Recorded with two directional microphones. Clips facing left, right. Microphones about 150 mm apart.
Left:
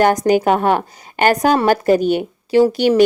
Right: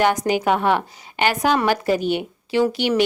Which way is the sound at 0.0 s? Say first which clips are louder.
Left 5 dB; 45° left (ahead or behind).